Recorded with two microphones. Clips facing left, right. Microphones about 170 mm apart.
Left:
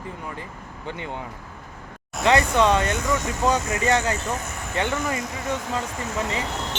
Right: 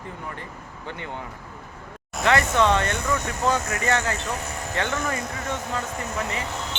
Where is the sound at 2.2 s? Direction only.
20° left (ahead or behind).